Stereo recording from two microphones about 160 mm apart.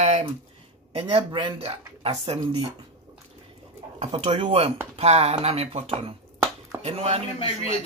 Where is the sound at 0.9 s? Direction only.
35° right (ahead or behind).